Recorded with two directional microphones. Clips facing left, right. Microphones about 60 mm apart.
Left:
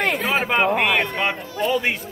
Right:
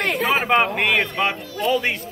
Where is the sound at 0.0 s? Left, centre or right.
Centre.